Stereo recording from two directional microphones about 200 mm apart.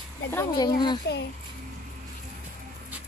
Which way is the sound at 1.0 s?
55° left (ahead or behind).